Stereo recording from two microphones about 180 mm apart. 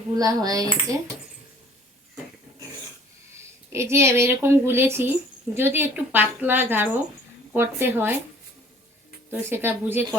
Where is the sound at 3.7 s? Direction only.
15° right (ahead or behind).